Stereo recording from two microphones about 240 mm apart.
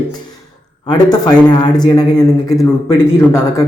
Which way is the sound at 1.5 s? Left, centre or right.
Centre.